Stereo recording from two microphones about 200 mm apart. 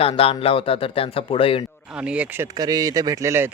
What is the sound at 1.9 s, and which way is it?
Speech, 5° right (ahead or behind).